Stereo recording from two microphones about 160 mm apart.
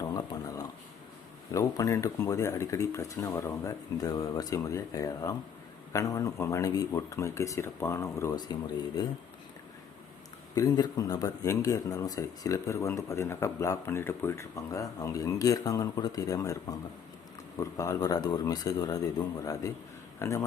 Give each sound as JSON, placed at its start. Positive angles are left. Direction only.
{"t": 0.0, "sound": "a sound", "side_deg": 25}
{"t": 1.5, "sound": "a man's voice", "side_deg": 20}
{"t": 10.5, "sound": "a man's voice", "side_deg": 20}